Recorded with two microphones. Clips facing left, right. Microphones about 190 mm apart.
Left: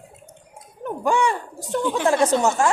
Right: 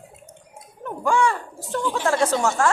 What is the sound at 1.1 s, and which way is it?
Speech, 20° left (ahead or behind).